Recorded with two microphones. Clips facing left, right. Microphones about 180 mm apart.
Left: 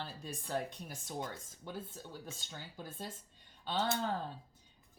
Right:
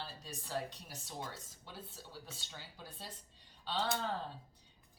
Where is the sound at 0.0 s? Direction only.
50° left (ahead or behind).